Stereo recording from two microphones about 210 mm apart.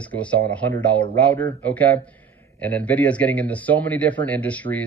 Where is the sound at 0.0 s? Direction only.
5° left (ahead or behind).